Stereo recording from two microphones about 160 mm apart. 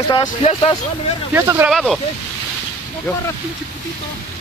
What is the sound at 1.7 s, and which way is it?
Speech, centre (ahead or behind).